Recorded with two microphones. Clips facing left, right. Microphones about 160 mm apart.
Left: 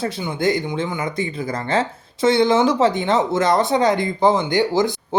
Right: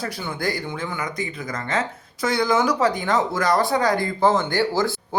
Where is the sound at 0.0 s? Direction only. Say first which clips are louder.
Left 6 dB; 20° left (ahead or behind).